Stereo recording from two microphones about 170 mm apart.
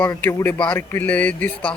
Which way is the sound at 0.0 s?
15° left (ahead or behind).